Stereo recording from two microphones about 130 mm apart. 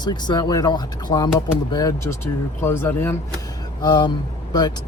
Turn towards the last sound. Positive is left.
turn(degrees=30)  # may be behind; listen again after turning